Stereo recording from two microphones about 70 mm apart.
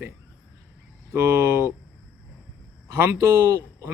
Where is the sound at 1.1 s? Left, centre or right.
Right.